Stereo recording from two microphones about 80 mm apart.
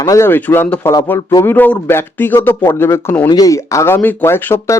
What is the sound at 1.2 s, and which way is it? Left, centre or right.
Speech, left.